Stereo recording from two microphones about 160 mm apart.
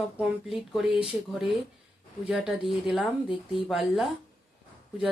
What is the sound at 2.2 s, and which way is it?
Speech, centre (ahead or behind).